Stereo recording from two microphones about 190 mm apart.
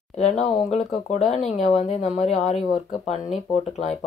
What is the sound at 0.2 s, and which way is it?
Speech, 40° left (ahead or behind).